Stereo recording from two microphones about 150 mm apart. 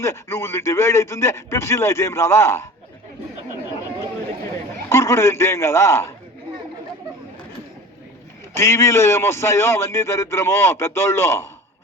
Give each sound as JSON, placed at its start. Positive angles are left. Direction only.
{"t": 0.0, "sound": "speech", "side_deg": 20}
{"t": 4.9, "sound": "a man's voice", "side_deg": 20}
{"t": 8.5, "sound": "a man's voice", "side_deg": 20}